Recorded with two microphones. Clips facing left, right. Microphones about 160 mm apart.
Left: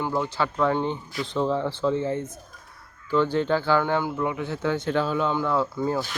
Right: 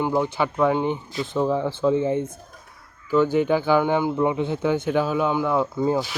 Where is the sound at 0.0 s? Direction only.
15° right (ahead or behind).